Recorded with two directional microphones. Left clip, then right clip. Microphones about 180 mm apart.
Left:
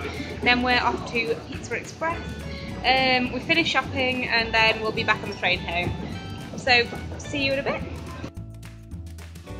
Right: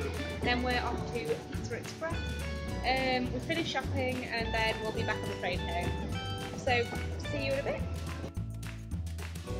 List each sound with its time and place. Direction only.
0.5 s a woman's voice: 10° left (ahead or behind)
6.1 s music: 5° left (ahead or behind)
7.3 s speech: 20° left (ahead or behind)